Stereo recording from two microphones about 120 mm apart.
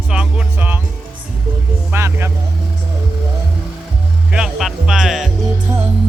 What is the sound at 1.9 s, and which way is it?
Music, 20° right (ahead or behind).